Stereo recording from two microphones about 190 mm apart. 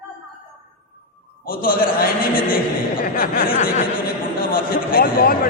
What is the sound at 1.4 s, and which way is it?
A man's voice, 50° left (ahead or behind).